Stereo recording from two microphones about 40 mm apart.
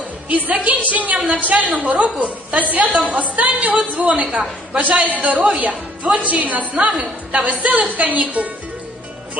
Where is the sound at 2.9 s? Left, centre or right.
Centre.